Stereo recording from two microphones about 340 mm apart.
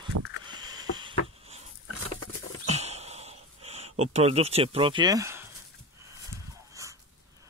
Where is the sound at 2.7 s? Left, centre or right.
Centre.